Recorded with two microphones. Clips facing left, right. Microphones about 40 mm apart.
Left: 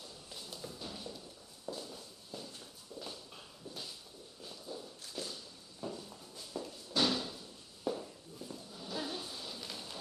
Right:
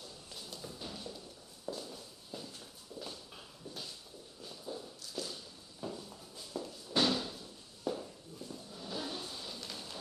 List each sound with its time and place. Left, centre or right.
0.0 s a sound: centre
1.6 s walk: centre
3.0 s clip-clop: centre
4.7 s walk: centre
5.2 s walk: left
5.8 s walk: centre
7.0 s slam: centre
7.9 s a sound: centre